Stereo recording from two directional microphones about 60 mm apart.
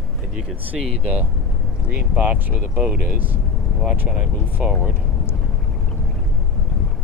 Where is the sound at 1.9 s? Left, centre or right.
Right.